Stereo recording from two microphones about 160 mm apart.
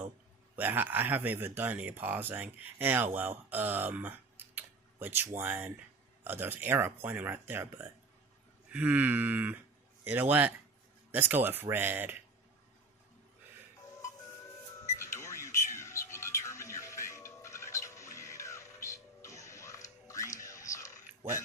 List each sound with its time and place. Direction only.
0.5 s speech: 10° right (ahead or behind)
14.9 s music: 15° left (ahead or behind)